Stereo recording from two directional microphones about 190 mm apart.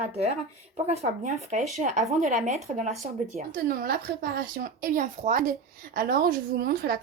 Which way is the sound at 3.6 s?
50° right (ahead or behind).